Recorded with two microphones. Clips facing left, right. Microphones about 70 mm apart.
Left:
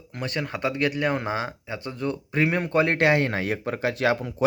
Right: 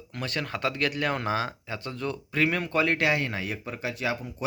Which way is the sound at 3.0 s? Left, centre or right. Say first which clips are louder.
Left 5 dB; left.